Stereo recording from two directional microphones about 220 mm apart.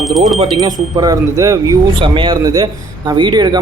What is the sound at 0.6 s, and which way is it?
Speech, 15° right (ahead or behind).